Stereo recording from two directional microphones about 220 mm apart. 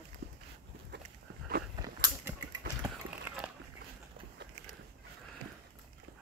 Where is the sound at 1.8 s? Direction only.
20° right (ahead or behind).